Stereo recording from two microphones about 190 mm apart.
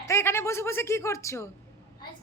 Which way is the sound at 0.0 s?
15° left (ahead or behind).